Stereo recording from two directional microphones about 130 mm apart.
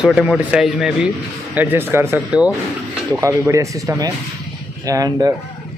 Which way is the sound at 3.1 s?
25° right (ahead or behind).